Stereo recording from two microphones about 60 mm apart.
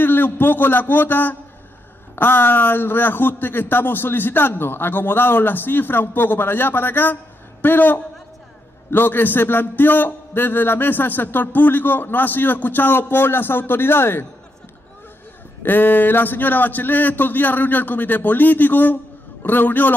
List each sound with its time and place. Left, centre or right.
0.0 s a man's voice: left
15.6 s a man's voice: left